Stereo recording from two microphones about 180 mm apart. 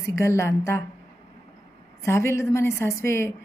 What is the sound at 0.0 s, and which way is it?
Speech, 15° left (ahead or behind).